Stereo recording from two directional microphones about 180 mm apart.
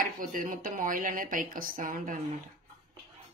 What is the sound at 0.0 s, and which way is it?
Speech, 50° right (ahead or behind).